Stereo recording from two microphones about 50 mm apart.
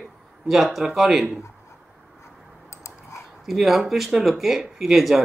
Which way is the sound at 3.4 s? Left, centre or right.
Centre.